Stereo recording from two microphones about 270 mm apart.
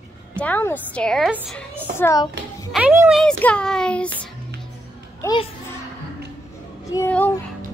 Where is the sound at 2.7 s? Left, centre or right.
Centre.